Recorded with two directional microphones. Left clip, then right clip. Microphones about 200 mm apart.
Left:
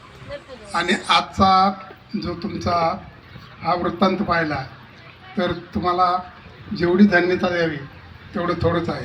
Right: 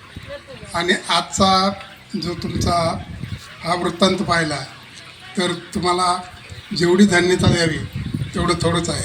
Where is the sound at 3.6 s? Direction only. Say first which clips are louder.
Right 1 dB; 20° left (ahead or behind).